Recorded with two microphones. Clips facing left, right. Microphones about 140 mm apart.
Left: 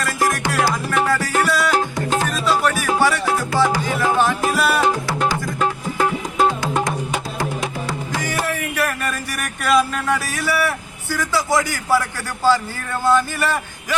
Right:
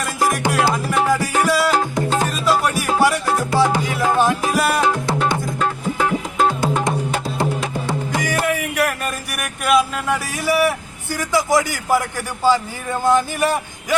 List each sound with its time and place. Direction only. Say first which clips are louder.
0.0 s music: right 1 dB; 15° right (ahead or behind)
5.5 s music: even; centre (ahead or behind)
8.2 s a sound: right 2 dB; 15° right (ahead or behind)
12.5 s speech: even; 15° right (ahead or behind)